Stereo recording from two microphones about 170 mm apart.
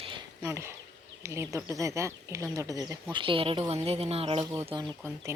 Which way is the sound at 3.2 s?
30° right (ahead or behind).